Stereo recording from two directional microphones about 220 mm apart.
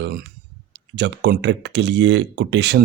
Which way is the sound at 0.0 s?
45° right (ahead or behind).